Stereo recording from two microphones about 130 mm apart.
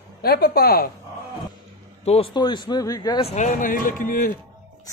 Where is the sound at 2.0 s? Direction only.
55° left (ahead or behind).